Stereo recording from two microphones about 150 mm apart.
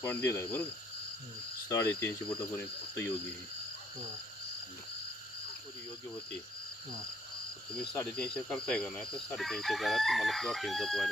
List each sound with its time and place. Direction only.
0.0 s cricket: 15° left (ahead or behind)
1.7 s speech: 20° left (ahead or behind)
8.1 s crowing: 5° left (ahead or behind)